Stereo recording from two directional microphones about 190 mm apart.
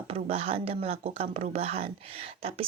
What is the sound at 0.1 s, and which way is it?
Speech, 30° right (ahead or behind).